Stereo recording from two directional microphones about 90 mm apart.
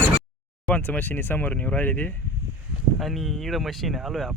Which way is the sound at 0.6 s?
15° left (ahead or behind).